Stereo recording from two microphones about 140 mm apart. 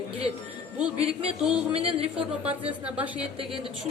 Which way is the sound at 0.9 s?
45° right (ahead or behind).